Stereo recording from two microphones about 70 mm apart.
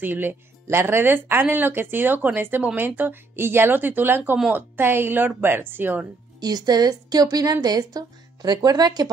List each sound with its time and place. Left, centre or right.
0.0 s speech: right
6.4 s speech: right